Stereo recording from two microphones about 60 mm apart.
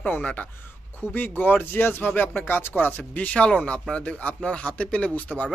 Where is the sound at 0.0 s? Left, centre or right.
Left.